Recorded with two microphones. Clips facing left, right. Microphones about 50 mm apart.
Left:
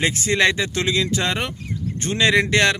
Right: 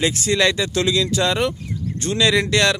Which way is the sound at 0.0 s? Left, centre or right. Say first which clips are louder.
Even; left.